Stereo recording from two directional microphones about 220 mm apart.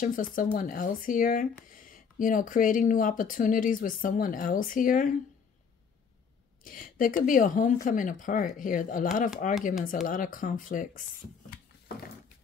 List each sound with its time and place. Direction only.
0.0 s speech: 40° left (ahead or behind)
6.6 s speech: 40° left (ahead or behind)